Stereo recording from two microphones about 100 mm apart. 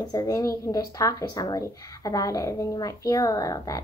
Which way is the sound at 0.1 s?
40° left (ahead or behind).